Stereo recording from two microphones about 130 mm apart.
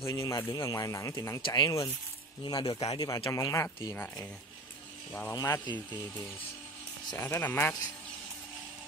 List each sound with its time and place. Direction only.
0.0 s speech: 25° left (ahead or behind)
5.3 s speech: 30° left (ahead or behind)
7.2 s speech: 15° left (ahead or behind)